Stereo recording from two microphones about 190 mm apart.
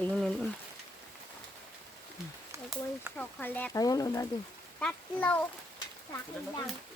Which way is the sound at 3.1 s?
10° left (ahead or behind).